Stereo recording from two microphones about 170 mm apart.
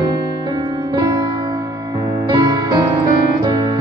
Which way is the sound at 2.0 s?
25° right (ahead or behind).